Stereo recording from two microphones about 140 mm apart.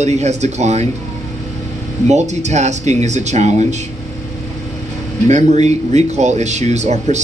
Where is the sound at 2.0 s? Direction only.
55° right (ahead or behind).